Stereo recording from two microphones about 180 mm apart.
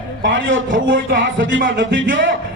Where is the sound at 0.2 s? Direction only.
90° right.